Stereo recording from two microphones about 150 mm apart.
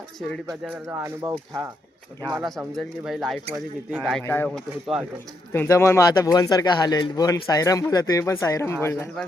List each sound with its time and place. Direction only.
0.9 s speech: 15° right (ahead or behind)
2.4 s speech: centre (ahead or behind)
4.2 s speech: 15° left (ahead or behind)
4.4 s speech: centre (ahead or behind)
5.5 s speech: 20° left (ahead or behind)